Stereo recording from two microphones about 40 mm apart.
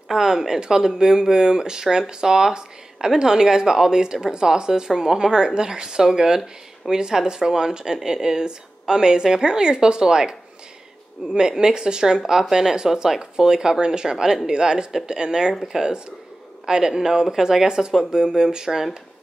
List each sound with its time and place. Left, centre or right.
0.1 s speech: centre
11.3 s speech: centre